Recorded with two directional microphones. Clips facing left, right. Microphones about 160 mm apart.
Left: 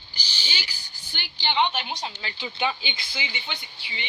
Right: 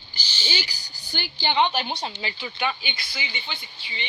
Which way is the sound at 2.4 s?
20° left (ahead or behind).